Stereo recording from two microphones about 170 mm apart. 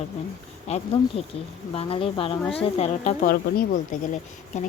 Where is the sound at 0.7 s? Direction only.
35° left (ahead or behind).